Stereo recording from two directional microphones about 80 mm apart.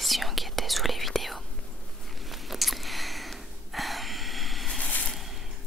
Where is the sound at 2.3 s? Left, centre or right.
Centre.